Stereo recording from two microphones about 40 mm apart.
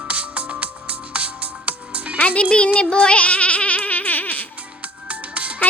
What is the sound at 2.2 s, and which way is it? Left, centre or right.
Music, left.